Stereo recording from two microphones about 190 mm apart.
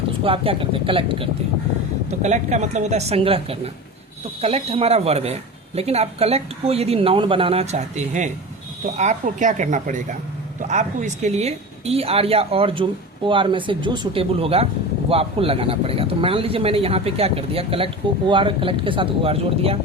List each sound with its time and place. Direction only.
0.3 s speech: 30° right (ahead or behind)